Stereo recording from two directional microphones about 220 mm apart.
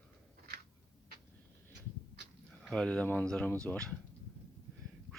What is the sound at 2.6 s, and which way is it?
Speech, 5° left (ahead or behind).